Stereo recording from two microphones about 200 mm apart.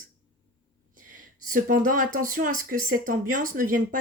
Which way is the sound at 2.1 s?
45° right (ahead or behind).